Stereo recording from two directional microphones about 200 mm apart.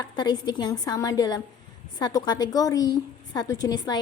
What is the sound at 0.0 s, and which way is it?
A woman's voice, 20° left (ahead or behind).